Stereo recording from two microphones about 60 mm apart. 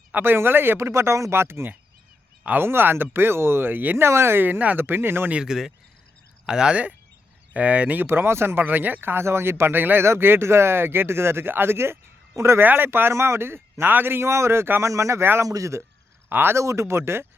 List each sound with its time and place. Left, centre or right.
0.2 s speech: right
0.8 s speech: right
2.4 s speech: right
2.6 s speech: right
5.3 s speech: centre
8.0 s speech: right
12.6 s speech: right
15.2 s speech: right
15.4 s speech: right
16.3 s speech: right
16.6 s speech: right